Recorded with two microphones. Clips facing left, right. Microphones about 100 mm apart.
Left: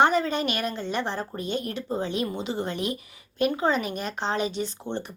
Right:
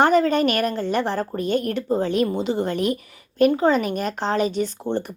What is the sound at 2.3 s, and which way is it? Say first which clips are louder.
Speech: right 7 dB; 35° right (ahead or behind).